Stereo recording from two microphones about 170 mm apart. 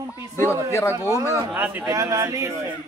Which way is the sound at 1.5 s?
10° right (ahead or behind).